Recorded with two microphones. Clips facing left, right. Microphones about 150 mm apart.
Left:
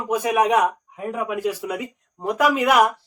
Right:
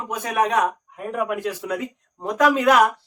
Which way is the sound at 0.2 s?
10° left (ahead or behind).